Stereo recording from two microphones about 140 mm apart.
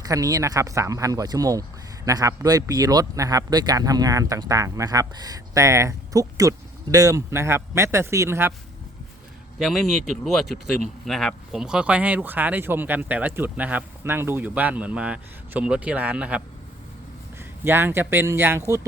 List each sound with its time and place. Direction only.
0.0 s speech: 25° right (ahead or behind)
9.6 s a man's voice: centre (ahead or behind)
17.6 s speech: 15° right (ahead or behind)